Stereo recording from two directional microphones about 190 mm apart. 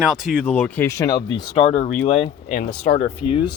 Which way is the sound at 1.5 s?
35° left (ahead or behind).